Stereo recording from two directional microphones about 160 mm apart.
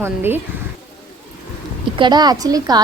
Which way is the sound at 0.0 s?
15° right (ahead or behind).